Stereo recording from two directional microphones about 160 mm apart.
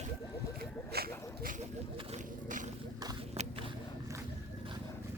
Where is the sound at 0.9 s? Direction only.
75° right (ahead or behind).